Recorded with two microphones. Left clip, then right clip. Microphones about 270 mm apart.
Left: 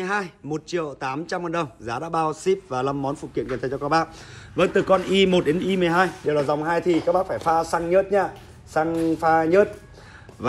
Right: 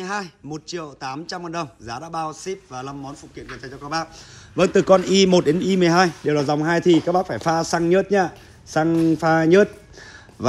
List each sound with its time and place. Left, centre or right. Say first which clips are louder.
0.0 s a man's voice: left 2 dB; centre
3.7 s a man's voice: left 5 dB; centre
4.6 s a man's voice: right 4 dB; right